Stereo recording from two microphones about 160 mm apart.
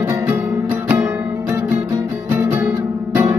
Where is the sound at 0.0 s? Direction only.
10° right (ahead or behind).